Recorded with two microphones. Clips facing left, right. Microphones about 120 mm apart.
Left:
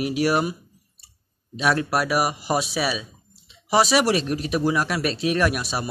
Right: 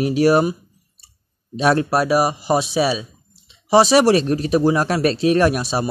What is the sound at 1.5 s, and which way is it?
Speech, 30° right (ahead or behind).